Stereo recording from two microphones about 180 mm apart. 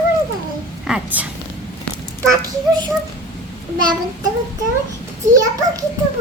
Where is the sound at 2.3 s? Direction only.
25° right (ahead or behind).